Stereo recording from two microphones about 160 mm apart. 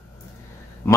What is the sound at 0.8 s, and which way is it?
Speech, 20° left (ahead or behind).